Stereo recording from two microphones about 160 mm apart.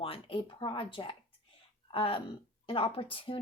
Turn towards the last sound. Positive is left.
turn(degrees=35)  # may be behind; listen again after turning